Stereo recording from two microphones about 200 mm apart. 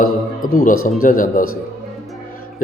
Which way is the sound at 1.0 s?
45° left (ahead or behind).